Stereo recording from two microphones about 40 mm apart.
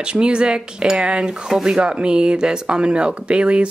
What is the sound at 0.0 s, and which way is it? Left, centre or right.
Speech, right.